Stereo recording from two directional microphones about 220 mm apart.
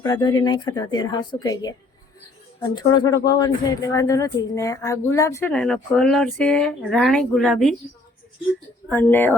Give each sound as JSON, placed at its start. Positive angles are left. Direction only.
{"t": 0.0, "sound": "speech", "side_deg": 15}
{"t": 8.9, "sound": "speech", "side_deg": 10}